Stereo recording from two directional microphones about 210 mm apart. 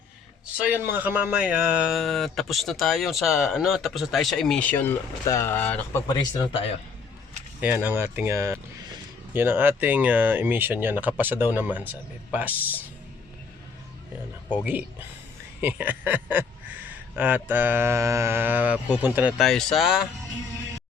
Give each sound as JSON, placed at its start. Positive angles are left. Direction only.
{"t": 0.5, "sound": "speech", "side_deg": -5}
{"t": 6.1, "sound": "speech", "side_deg": 20}
{"t": 7.6, "sound": "speech", "side_deg": -10}
{"t": 14.6, "sound": "speech", "side_deg": -10}